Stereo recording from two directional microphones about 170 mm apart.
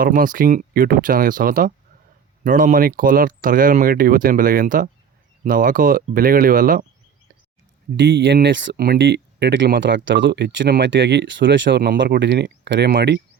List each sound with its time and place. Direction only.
0.0 s speech: 55° right (ahead or behind)
7.9 s speech: 90° right